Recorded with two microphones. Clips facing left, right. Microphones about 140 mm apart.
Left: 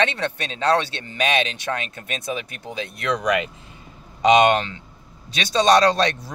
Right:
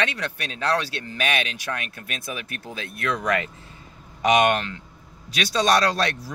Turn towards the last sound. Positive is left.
turn(degrees=20)  # may be behind; listen again after turning